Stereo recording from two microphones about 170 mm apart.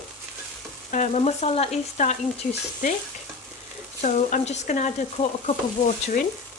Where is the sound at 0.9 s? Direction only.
45° left (ahead or behind).